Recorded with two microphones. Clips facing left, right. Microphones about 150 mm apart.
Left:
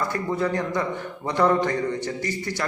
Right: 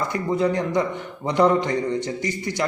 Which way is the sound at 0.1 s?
20° right (ahead or behind).